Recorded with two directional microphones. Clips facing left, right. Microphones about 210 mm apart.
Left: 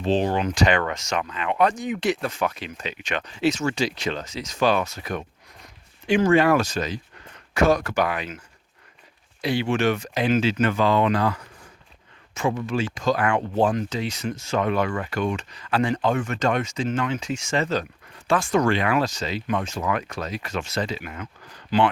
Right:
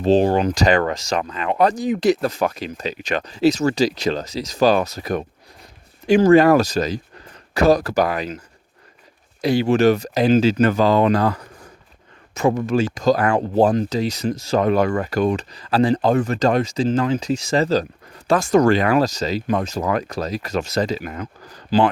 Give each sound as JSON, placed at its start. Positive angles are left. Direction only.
{"t": 0.0, "sound": "speech", "side_deg": -40}
{"t": 9.4, "sound": "speech", "side_deg": -40}